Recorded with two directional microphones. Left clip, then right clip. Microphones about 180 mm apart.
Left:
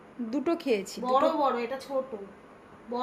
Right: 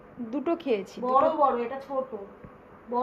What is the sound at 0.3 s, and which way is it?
A woman's voice, 20° left (ahead or behind).